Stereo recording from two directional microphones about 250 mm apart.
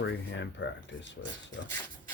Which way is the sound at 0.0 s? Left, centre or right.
Left.